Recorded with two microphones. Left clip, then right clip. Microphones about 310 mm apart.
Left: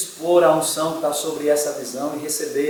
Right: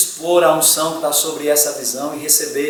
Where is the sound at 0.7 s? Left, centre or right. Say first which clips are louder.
Right 3 dB; centre.